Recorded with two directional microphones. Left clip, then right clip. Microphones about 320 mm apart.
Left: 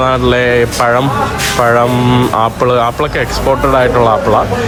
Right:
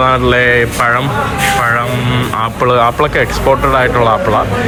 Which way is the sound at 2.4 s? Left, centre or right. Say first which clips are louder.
Right 5 dB; centre.